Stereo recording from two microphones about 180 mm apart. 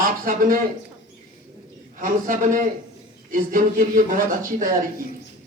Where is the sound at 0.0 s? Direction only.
50° right (ahead or behind).